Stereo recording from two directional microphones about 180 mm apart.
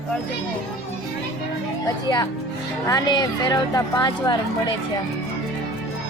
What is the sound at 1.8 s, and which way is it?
A woman's voice, 20° left (ahead or behind).